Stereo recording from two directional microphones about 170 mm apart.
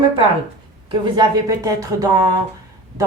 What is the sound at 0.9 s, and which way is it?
A woman's voice, 30° right (ahead or behind).